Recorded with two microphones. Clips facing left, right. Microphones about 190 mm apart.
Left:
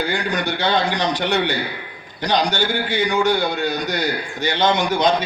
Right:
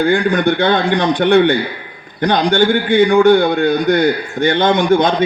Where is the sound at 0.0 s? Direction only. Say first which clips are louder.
Right 9 dB; 55° right (ahead or behind).